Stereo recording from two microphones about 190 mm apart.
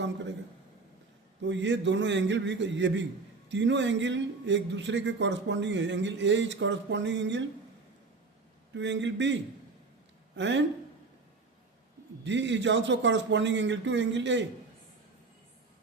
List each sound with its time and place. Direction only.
1.4 s a man's voice: 70° right (ahead or behind)
8.7 s a man's voice: 70° right (ahead or behind)
12.2 s a man's voice: 75° right (ahead or behind)